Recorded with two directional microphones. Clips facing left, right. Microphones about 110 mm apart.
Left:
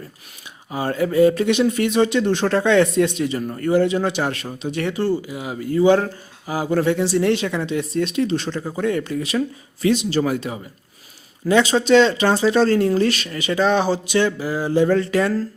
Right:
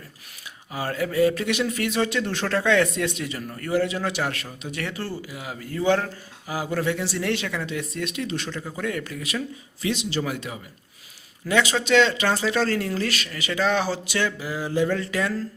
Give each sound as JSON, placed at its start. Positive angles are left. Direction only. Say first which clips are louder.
{"t": 0.7, "sound": "speech", "louder": "left 6 dB", "side_deg": 25}
{"t": 6.5, "sound": "speech", "louder": "left 6 dB", "side_deg": 30}
{"t": 9.8, "sound": "speech", "louder": "left 8 dB", "side_deg": 45}